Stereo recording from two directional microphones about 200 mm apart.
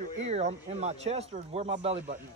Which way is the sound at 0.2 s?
35° right (ahead or behind).